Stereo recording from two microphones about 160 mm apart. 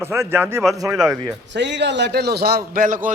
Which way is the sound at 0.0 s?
15° right (ahead or behind).